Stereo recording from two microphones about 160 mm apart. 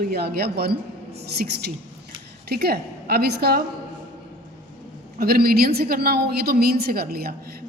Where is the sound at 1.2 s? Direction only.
90° right.